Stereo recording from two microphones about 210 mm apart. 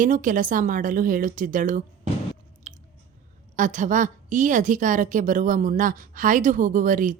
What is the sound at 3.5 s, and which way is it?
A woman's voice, 35° right (ahead or behind).